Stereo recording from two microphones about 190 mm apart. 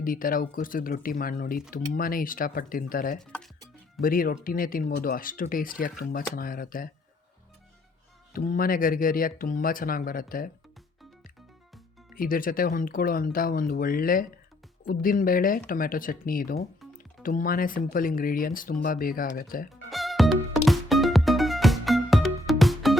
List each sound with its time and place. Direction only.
0.0 s speech: 45° left (ahead or behind)
3.2 s speech: 5° left (ahead or behind)
4.0 s speech: 50° left (ahead or behind)
8.3 s speech: 50° left (ahead or behind)
12.1 s speech: 45° left (ahead or behind)
19.9 s music: centre (ahead or behind)